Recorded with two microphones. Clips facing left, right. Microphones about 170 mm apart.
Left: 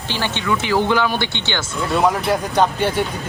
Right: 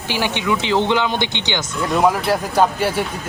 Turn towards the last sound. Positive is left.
turn(degrees=-5)  # may be behind; listen again after turning